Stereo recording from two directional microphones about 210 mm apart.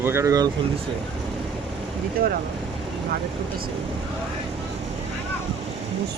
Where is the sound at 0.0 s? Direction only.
10° right (ahead or behind).